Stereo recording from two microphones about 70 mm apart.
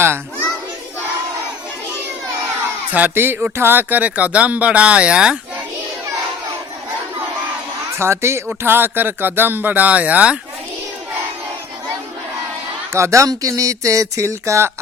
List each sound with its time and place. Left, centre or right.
2.9 s speech: right
7.9 s speech: right
12.9 s speech: right